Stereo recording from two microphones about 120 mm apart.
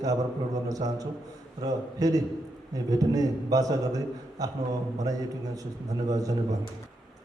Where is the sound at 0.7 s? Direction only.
30° right (ahead or behind).